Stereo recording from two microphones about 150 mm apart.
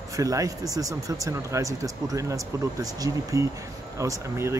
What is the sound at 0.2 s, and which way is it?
Speech, 25° right (ahead or behind).